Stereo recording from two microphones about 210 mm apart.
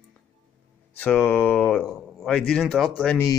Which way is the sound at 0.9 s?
5° left (ahead or behind).